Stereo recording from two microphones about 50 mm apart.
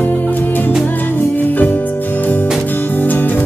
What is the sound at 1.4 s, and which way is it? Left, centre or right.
Music, left.